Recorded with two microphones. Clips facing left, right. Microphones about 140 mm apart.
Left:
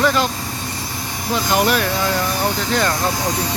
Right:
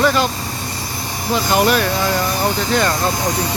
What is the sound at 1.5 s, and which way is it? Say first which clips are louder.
Speech: right 2 dB; centre (ahead or behind).